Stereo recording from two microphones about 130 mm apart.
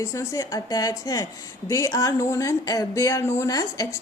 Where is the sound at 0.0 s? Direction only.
25° left (ahead or behind).